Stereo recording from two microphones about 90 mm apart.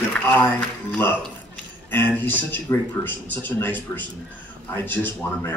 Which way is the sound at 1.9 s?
25° left (ahead or behind).